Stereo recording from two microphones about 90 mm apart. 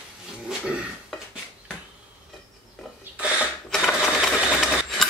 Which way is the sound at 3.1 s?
15° right (ahead or behind).